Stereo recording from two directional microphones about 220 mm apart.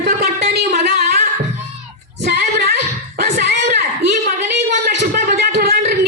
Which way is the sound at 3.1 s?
40° right (ahead or behind).